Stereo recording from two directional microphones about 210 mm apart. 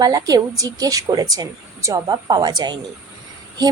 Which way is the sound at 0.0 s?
15° right (ahead or behind).